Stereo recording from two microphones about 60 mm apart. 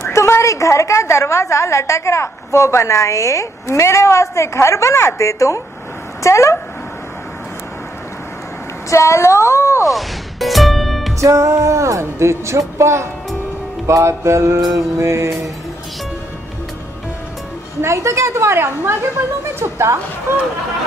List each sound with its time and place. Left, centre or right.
0.1 s a woman's voice: left
8.9 s speech: left
9.8 s music: centre
11.1 s music: right
13.8 s a woman's voice: right
14.6 s mantra: right
15.0 s a woman's voice: right
17.8 s a woman's voice: right